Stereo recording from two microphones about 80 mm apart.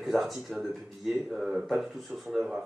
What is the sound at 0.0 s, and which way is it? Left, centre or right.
Speech, centre.